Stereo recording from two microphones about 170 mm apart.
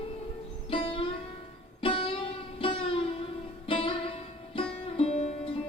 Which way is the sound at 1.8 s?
30° left (ahead or behind).